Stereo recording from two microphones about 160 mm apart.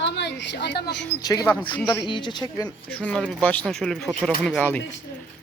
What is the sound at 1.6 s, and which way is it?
Speech, 30° left (ahead or behind).